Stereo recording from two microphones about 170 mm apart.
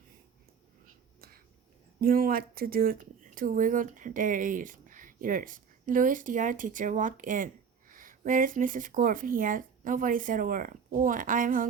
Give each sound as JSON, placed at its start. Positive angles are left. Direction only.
{"t": 2.0, "sound": "speech", "side_deg": -55}